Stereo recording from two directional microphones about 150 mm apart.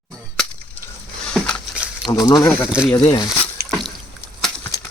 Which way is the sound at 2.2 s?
20° left (ahead or behind).